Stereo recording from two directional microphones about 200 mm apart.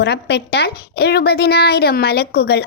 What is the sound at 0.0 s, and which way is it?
A woman's voice, 55° left (ahead or behind).